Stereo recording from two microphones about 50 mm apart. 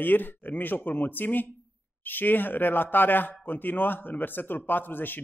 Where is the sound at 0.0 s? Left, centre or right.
Left.